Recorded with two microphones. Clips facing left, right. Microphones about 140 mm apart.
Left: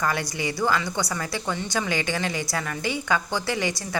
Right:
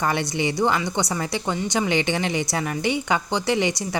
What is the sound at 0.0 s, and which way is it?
A woman's voice, 25° right (ahead or behind).